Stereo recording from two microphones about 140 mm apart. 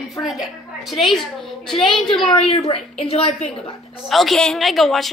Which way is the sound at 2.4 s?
45° left (ahead or behind).